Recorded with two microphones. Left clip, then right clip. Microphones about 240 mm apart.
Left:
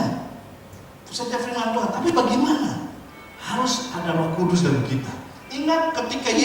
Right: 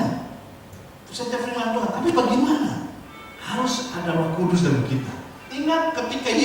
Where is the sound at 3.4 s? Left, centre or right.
Centre.